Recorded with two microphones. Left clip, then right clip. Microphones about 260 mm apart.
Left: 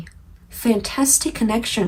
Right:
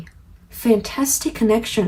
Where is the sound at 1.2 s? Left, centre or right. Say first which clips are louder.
Right 4 dB; left.